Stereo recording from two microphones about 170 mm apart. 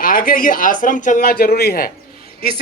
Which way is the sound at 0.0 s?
55° left (ahead or behind).